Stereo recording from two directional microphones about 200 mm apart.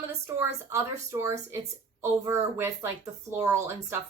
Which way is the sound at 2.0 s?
10° right (ahead or behind).